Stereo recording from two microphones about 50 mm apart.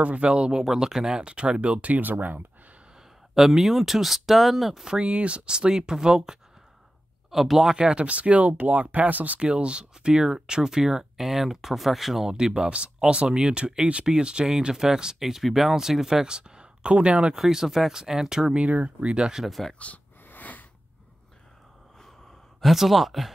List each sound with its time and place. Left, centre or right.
0.0 s speech: right
0.3 s speech: centre; by 2.4 s right
3.3 s speech: centre
4.8 s speech: right; by 7.7 s centre
7.7 s speech: right
9.4 s speech: right
18.7 s speech: right
19.4 s speech: centre
19.7 s speech: left
20.2 s a sound: left
22.6 s speech: centre